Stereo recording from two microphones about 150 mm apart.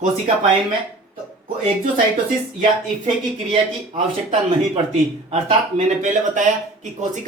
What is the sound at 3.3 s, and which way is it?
Speech, 40° right (ahead or behind).